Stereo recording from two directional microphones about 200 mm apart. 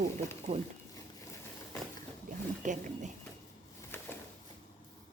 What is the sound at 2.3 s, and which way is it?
Speech, 45° right (ahead or behind).